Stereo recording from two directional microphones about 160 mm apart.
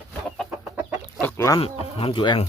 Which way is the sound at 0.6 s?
10° right (ahead or behind).